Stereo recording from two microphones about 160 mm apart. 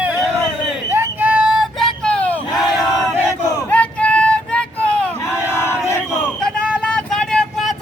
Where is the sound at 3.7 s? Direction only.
10° left (ahead or behind).